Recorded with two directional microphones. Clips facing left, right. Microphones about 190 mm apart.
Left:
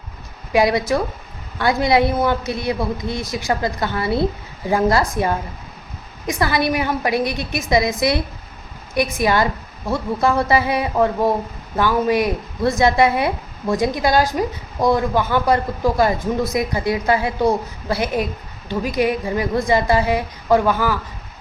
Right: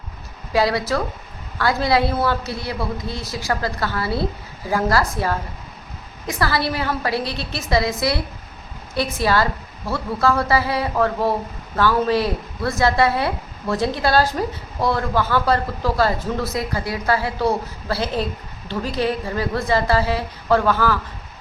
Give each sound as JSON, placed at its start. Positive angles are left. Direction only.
{"t": 0.5, "sound": "a woman's voice", "side_deg": 20}